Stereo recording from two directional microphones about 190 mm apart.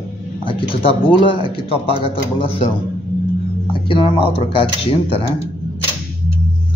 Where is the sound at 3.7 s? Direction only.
25° left (ahead or behind).